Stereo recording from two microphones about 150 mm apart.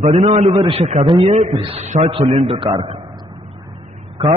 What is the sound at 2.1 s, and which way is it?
Speech, 30° right (ahead or behind).